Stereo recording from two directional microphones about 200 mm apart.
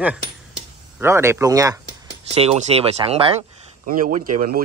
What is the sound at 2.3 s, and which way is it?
Speech, 30° right (ahead or behind).